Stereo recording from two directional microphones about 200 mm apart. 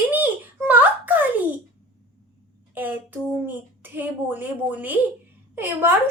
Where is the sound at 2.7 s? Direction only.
10° right (ahead or behind).